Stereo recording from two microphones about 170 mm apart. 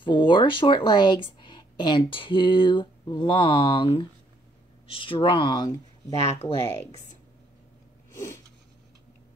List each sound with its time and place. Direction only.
0.0 s speech: 30° left (ahead or behind)